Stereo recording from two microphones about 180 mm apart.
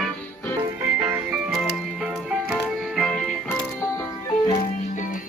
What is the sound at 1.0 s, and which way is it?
Music, 5° right (ahead or behind).